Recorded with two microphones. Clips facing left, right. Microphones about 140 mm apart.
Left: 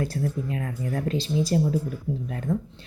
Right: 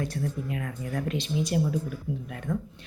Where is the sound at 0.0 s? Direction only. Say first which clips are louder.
Left 3 dB; 35° left (ahead or behind).